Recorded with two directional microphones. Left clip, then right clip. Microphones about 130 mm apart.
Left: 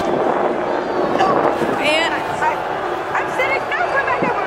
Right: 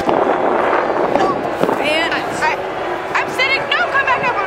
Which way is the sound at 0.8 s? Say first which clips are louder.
Right 2 dB; centre (ahead or behind).